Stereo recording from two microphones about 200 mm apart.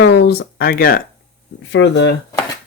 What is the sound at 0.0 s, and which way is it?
Speech, 60° left (ahead or behind).